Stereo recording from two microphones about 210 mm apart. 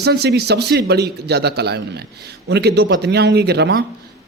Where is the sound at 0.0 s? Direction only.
50° right (ahead or behind).